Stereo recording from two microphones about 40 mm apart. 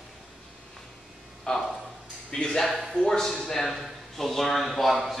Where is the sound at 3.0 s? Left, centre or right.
Centre.